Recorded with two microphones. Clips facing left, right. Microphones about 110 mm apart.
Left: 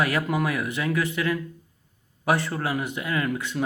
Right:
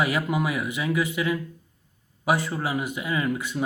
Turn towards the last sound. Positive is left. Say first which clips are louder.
# even
turn(degrees=-5)  # may be behind; listen again after turning